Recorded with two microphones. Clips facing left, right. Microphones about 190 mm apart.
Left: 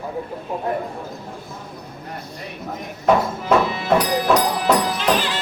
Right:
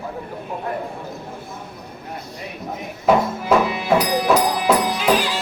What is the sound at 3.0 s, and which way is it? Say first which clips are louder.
Music: right 1 dB; 5° right (ahead or behind).